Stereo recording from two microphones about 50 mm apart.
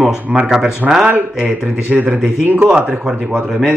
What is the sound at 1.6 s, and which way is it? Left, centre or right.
Speech, right.